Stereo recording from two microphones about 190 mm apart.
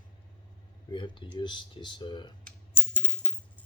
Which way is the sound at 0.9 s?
25° left (ahead or behind).